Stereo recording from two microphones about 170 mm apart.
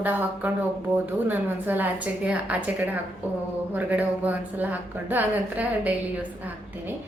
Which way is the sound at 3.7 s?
10° right (ahead or behind).